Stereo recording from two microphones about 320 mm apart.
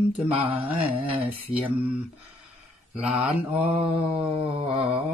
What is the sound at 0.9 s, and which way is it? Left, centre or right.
Mantra, centre.